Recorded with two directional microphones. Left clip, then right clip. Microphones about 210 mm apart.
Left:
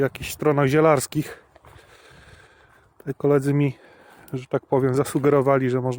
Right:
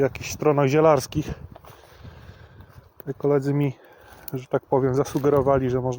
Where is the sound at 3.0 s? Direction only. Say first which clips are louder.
Left 2 dB; 35° left (ahead or behind).